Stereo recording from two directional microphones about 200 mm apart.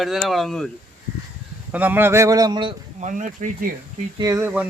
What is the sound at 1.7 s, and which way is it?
Speech, 10° right (ahead or behind).